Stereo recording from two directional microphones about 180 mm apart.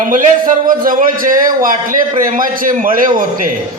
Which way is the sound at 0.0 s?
45° right (ahead or behind).